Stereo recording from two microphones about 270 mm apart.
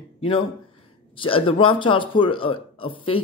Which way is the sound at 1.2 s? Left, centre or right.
Centre.